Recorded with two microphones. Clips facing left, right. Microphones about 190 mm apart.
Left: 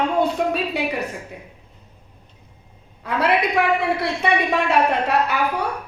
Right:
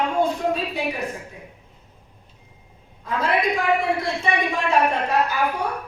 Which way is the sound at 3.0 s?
70° left (ahead or behind).